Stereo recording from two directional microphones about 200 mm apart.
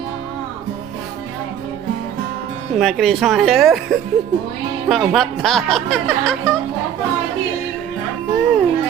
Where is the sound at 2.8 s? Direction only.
Centre (ahead or behind).